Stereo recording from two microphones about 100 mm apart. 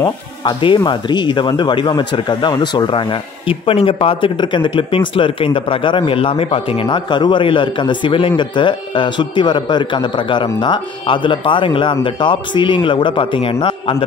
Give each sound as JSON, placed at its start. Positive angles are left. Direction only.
{"t": 0.0, "sound": "speech", "side_deg": 50}